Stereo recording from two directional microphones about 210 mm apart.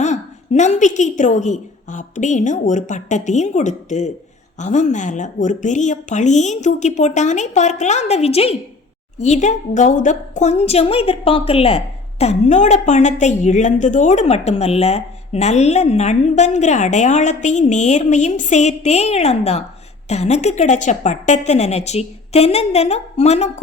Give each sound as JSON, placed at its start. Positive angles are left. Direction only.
{"t": 0.0, "sound": "a woman's voice", "side_deg": 35}